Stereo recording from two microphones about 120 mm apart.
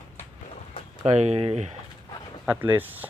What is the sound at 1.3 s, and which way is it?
Speech, 50° right (ahead or behind).